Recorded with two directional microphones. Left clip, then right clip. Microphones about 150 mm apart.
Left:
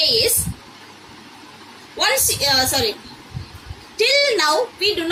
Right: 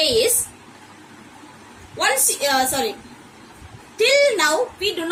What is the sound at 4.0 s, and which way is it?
Speech, 20° right (ahead or behind).